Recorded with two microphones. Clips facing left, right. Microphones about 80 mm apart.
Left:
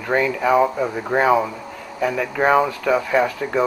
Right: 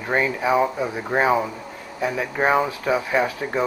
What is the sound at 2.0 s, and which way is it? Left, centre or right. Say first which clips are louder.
Speech: left 3 dB; left.